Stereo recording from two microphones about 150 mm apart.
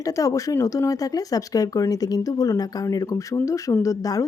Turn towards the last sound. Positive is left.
turn(degrees=25)  # may be behind; listen again after turning